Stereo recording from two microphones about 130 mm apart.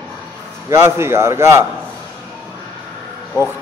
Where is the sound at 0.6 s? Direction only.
20° right (ahead or behind).